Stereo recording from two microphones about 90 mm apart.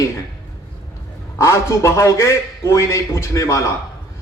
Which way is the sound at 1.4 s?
35° left (ahead or behind).